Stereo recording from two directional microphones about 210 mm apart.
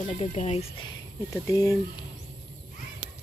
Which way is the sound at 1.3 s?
15° left (ahead or behind).